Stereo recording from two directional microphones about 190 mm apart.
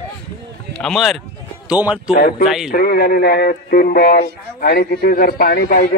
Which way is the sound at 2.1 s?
50° left (ahead or behind).